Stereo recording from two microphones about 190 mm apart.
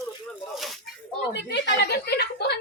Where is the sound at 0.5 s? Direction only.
Centre (ahead or behind).